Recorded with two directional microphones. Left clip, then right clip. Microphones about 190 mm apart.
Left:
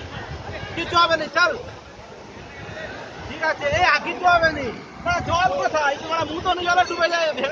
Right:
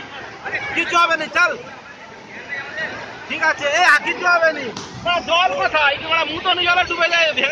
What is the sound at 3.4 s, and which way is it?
A man's voice, 20° right (ahead or behind).